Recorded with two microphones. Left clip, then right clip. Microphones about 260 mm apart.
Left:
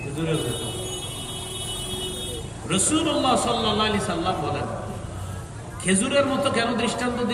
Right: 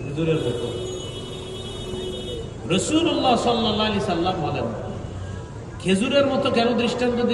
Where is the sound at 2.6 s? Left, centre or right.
Left.